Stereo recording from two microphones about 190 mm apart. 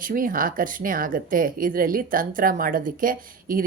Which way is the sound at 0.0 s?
45° right (ahead or behind).